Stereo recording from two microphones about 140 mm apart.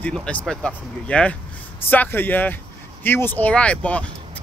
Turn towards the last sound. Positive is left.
turn(degrees=10)  # may be behind; listen again after turning